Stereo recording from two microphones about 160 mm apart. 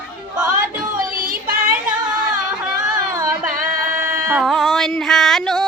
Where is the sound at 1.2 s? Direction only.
65° right (ahead or behind).